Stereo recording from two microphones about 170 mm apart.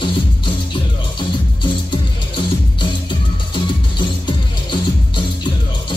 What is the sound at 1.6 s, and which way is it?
Music, 30° left (ahead or behind).